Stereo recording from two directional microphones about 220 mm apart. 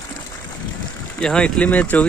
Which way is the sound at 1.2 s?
5° left (ahead or behind).